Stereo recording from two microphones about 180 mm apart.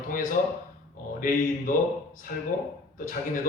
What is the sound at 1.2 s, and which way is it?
A man's voice, 50° left (ahead or behind).